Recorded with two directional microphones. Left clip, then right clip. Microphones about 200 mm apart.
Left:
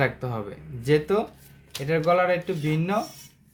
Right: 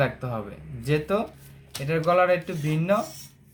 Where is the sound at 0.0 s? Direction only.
30° left (ahead or behind).